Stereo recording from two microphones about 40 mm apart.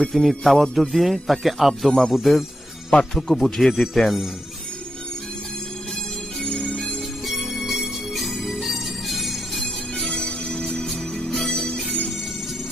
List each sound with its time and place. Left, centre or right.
0.1 s speech: centre
1.9 s speech: centre
6.4 s music: centre
7.3 s music: centre
10.1 s music: centre
11.7 s music: left